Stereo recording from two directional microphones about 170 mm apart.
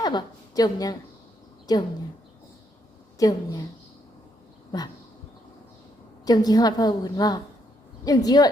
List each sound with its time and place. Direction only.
0.0 s a woman's voice: 25° left (ahead or behind)
3.2 s a woman's voice: 20° left (ahead or behind)
6.2 s a woman's voice: 25° left (ahead or behind)